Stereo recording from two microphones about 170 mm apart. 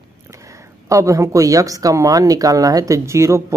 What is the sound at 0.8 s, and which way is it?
Speech, 20° right (ahead or behind).